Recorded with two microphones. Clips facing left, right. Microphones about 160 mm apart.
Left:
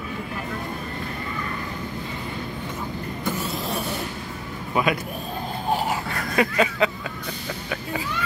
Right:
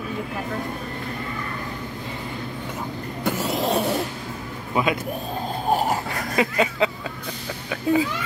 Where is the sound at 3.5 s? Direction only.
80° right.